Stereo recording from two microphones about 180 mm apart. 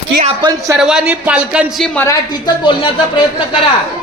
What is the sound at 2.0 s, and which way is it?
Speech, 20° left (ahead or behind).